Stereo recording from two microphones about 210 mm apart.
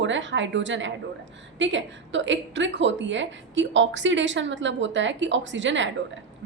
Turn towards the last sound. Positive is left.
turn(degrees=-60)  # may be behind; listen again after turning